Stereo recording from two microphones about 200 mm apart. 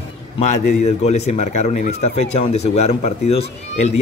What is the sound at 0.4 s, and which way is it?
Speech, 35° left (ahead or behind).